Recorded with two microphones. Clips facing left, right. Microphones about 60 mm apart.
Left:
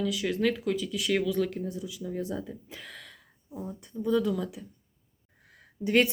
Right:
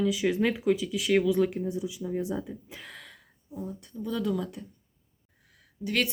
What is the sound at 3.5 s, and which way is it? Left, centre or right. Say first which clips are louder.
Speech: right 1 dB; centre.